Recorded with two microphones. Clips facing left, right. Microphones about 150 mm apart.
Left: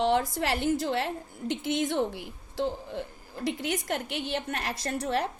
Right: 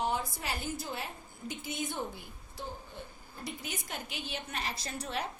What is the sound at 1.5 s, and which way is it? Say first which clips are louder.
A woman's voice: left 10 dB; 90° left.